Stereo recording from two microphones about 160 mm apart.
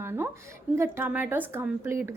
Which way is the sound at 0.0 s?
15° right (ahead or behind).